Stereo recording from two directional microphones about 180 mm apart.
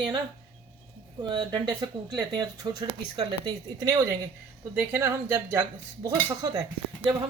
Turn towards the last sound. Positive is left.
turn(degrees=-25)  # may be behind; listen again after turning